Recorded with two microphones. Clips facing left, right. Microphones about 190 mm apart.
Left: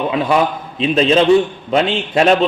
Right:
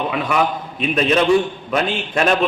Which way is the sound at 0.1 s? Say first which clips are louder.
Left 4 dB; 25° left (ahead or behind).